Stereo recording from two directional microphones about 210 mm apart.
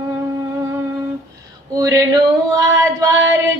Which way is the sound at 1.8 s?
15° right (ahead or behind).